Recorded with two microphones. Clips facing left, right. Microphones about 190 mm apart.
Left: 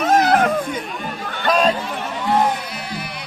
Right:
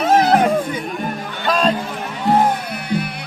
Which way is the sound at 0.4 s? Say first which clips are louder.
Right 2 dB; 10° right (ahead or behind).